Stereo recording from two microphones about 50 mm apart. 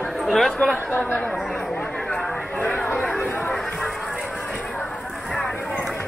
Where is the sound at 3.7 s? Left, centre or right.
Centre.